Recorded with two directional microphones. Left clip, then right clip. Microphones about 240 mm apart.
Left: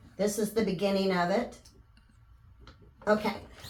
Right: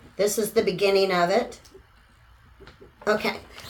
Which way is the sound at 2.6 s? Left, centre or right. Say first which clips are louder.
Right 6 dB; right.